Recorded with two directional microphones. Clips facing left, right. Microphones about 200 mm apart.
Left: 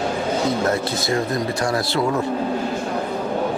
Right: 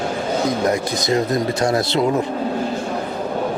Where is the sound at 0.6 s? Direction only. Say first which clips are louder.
Right 2 dB; 15° right (ahead or behind).